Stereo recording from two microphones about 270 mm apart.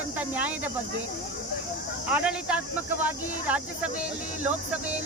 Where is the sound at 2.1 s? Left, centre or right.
Centre.